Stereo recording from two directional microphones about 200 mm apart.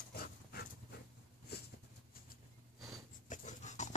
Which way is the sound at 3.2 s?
35° left (ahead or behind).